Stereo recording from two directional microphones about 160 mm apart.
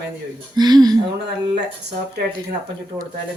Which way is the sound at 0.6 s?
25° right (ahead or behind).